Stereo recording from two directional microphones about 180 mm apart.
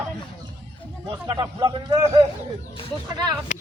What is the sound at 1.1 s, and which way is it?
Speech, 20° right (ahead or behind).